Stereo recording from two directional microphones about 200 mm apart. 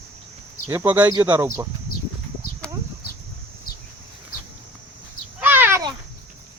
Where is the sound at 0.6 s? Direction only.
10° right (ahead or behind).